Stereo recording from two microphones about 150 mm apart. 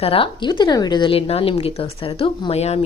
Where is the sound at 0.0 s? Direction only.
35° left (ahead or behind).